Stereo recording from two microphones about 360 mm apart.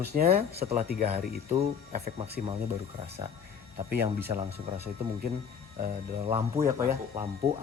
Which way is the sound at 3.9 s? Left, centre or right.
Right.